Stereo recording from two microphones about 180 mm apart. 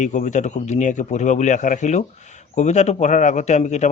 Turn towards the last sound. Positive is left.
turn(degrees=40)  # may be behind; listen again after turning